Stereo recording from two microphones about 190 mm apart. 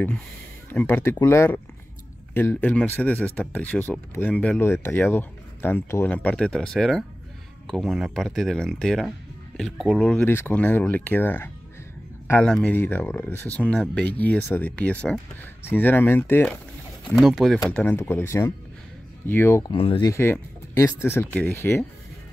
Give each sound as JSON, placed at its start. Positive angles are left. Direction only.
{"t": 0.7, "sound": "speech", "side_deg": 10}
{"t": 17.1, "sound": "speech", "side_deg": 0}
{"t": 19.7, "sound": "speech", "side_deg": 30}
{"t": 20.1, "sound": "speech", "side_deg": 15}